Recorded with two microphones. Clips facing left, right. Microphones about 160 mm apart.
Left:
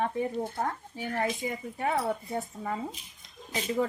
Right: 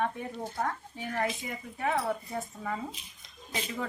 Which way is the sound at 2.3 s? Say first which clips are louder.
Left 2 dB; 25° left (ahead or behind).